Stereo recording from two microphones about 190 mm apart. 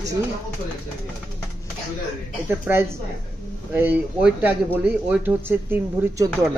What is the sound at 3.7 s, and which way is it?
Speech, 10° right (ahead or behind).